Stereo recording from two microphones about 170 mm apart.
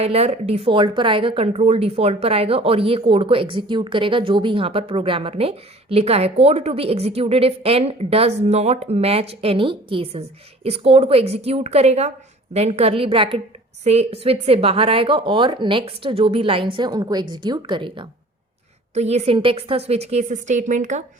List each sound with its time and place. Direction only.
0.0 s a woman's voice: 35° right (ahead or behind)
18.9 s a woman's voice: 40° right (ahead or behind)